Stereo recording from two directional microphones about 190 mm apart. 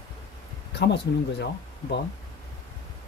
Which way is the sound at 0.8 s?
65° left (ahead or behind).